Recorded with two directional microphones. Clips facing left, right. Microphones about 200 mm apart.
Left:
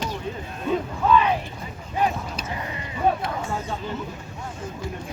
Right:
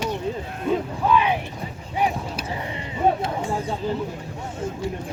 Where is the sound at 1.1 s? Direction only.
10° right (ahead or behind).